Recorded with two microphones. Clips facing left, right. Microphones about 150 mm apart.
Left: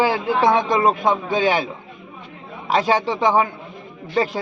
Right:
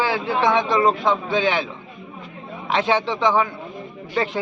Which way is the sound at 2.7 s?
40° left (ahead or behind).